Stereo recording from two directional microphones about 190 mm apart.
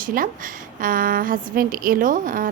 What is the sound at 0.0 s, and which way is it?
A woman's voice, 45° right (ahead or behind).